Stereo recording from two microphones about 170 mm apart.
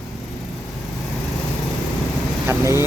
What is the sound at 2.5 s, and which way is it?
Speech, 15° right (ahead or behind).